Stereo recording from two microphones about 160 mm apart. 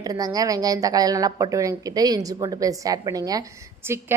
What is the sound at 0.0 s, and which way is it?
A woman's voice, 25° right (ahead or behind).